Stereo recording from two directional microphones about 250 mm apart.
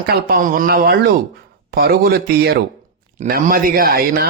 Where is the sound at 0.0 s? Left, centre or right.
Right.